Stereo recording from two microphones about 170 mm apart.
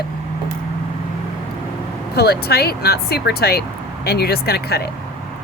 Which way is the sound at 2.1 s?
70° left (ahead or behind).